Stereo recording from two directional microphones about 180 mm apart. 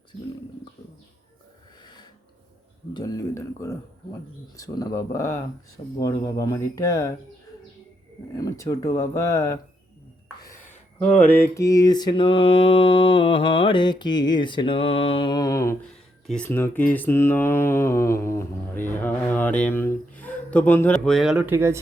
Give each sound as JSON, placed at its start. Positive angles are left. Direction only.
{"t": 1.8, "sound": "a sound", "side_deg": 25}
{"t": 2.9, "sound": "mantra", "side_deg": 20}
{"t": 4.5, "sound": "speech", "side_deg": 20}
{"t": 6.0, "sound": "mantra", "side_deg": 20}
{"t": 8.4, "sound": "speech", "side_deg": 20}
{"t": 11.1, "sound": "mantra", "side_deg": 10}
{"t": 16.2, "sound": "speech", "side_deg": 5}